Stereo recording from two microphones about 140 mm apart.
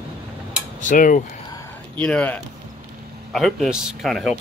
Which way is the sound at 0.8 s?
70° left (ahead or behind).